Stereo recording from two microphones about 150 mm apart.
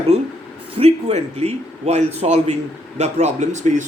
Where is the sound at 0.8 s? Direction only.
45° right (ahead or behind).